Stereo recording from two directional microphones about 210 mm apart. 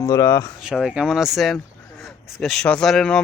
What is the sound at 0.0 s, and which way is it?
Speech, 15° left (ahead or behind).